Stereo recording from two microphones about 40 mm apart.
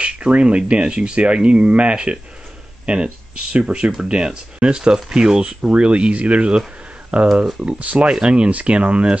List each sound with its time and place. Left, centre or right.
0.0 s speech: right